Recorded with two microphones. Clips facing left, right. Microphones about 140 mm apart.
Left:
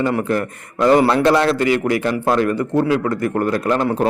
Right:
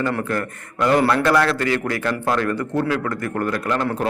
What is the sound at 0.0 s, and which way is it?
A man's voice, 20° left (ahead or behind).